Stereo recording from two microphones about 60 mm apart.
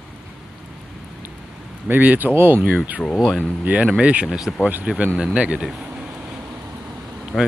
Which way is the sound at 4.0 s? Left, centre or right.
Right.